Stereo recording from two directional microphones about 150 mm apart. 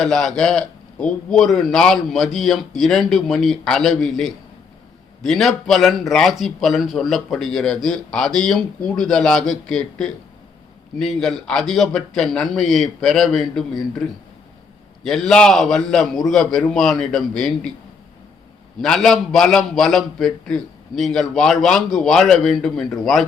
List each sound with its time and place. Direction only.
0.0 s a man's voice: 5° left (ahead or behind)
15.0 s a man's voice: 5° left (ahead or behind)
18.8 s a man's voice: centre (ahead or behind)